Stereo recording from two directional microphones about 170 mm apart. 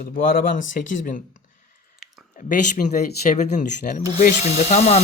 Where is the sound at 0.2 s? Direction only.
55° left (ahead or behind).